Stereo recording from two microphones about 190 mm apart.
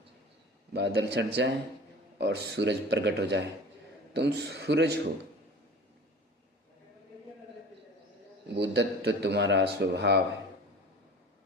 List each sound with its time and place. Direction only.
0.7 s a man's voice: 60° right (ahead or behind)
8.5 s a man's voice: 65° right (ahead or behind)